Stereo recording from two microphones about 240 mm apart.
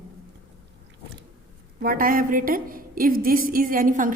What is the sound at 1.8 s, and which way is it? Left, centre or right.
A woman's voice, right.